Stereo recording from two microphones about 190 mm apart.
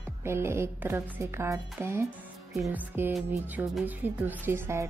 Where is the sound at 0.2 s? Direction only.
15° right (ahead or behind).